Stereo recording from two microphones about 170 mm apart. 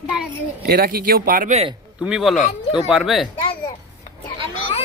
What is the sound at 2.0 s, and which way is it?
Speech, 5° right (ahead or behind).